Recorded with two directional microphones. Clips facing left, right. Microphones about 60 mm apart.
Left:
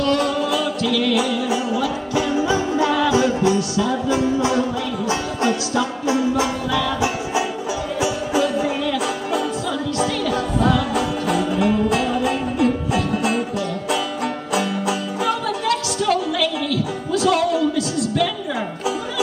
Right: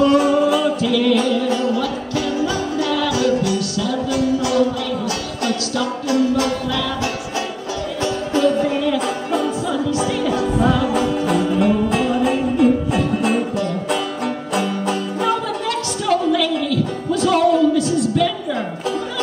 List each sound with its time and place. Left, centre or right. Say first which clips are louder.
0.0 s music: right 5 dB; centre